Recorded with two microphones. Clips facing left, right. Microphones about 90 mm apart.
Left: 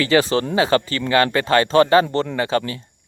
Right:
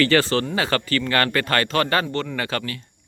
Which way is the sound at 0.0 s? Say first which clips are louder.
Left 2 dB; 15° left (ahead or behind).